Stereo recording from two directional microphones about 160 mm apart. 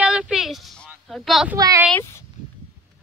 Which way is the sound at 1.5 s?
25° right (ahead or behind).